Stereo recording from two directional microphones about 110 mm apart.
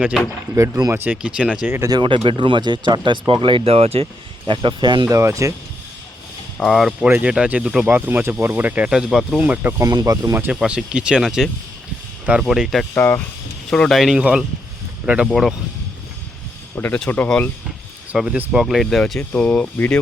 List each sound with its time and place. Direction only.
0.5 s speech: 25° right (ahead or behind); by 1.5 s 10° right (ahead or behind)
1.6 s speech: 20° right (ahead or behind)
1.9 s speech: 45° right (ahead or behind)
5.1 s speech: 30° right (ahead or behind)
6.6 s speech: centre (ahead or behind)
9.8 s speech: 35° right (ahead or behind)
10.3 s speech: 20° right (ahead or behind)
10.6 s speech: 5° right (ahead or behind)
12.9 s speech: 20° left (ahead or behind)
13.7 s speech: 5° left (ahead or behind)
16.7 s speech: 15° left (ahead or behind)
18.1 s speech: 10° right (ahead or behind); by 20.0 s 10° left (ahead or behind)